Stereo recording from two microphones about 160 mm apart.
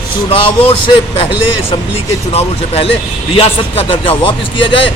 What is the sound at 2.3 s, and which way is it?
A man's voice, 40° left (ahead or behind).